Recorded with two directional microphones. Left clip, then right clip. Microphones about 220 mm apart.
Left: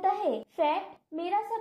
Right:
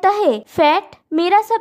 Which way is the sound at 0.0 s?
45° right (ahead or behind).